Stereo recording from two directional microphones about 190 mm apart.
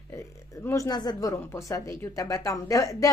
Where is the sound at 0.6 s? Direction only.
15° left (ahead or behind).